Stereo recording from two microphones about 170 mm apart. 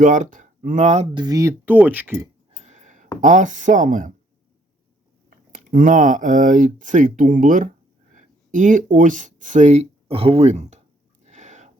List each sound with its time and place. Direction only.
0.0 s speech: 50° right (ahead or behind)
1.1 s speech: 25° right (ahead or behind)
2.6 s a sound: 45° right (ahead or behind)
3.2 s speech: 45° right (ahead or behind)
5.5 s speech: 50° right (ahead or behind)
11.3 s wheeze: 45° right (ahead or behind)